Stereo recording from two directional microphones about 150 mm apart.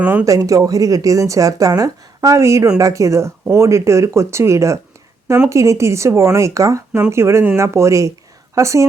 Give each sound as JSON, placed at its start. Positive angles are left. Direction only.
{"t": 0.0, "sound": "speech", "side_deg": -10}
{"t": 0.3, "sound": "speech", "side_deg": -20}